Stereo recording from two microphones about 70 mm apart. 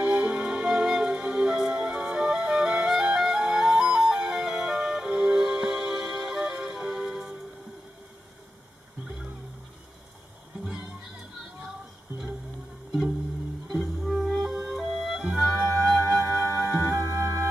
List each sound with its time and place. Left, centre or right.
0.0 s music: centre
9.0 s music: centre
13.7 s music: centre
17.1 s music: right